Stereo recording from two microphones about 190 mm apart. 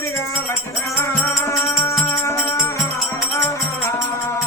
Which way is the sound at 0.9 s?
15° left (ahead or behind).